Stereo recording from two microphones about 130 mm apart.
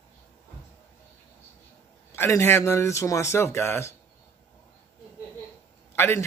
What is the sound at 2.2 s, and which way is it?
Speech, 20° left (ahead or behind).